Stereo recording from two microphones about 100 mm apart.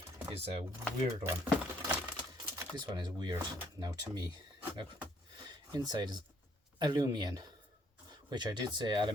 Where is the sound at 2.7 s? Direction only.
45° right (ahead or behind).